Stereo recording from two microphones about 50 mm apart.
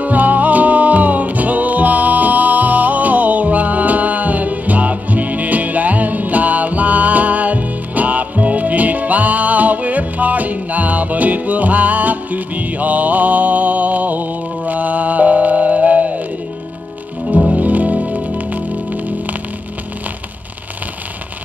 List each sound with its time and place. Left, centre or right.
0.0 s music: right
17.5 s music: right